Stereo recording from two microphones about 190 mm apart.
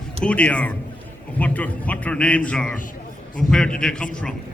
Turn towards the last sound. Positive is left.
turn(degrees=5)  # may be behind; listen again after turning